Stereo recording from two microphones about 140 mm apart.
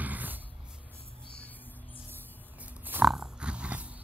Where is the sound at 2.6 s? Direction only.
15° right (ahead or behind).